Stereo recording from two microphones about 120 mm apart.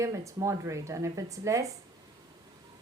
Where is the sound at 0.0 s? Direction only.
25° right (ahead or behind).